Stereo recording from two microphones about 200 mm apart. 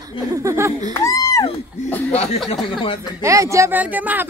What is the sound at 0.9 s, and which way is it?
Speech, 15° left (ahead or behind).